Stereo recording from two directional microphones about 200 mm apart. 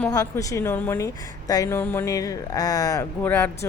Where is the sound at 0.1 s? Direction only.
15° left (ahead or behind).